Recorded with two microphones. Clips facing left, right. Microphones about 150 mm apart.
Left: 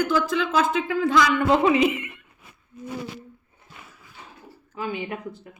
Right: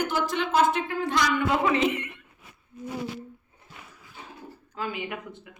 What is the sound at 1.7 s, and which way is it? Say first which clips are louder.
Speech: left 4 dB; 5° left (ahead or behind).